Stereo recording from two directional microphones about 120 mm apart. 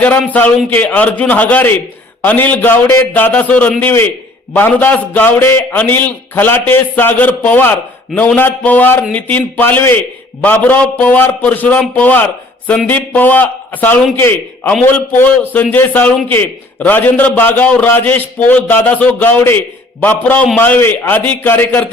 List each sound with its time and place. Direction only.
0.3 s a man's voice: 15° left (ahead or behind)